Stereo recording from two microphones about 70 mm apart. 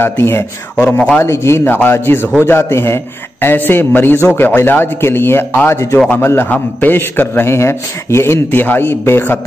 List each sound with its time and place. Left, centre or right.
0.0 s a man's voice: left
8.5 s a man's voice: left